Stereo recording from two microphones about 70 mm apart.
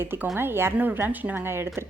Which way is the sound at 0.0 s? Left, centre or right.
Right.